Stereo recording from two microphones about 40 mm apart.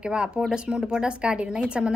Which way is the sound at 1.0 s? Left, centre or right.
Right.